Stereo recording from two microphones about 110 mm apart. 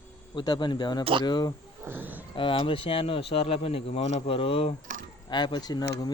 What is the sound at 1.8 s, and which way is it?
Grunt, 15° right (ahead or behind).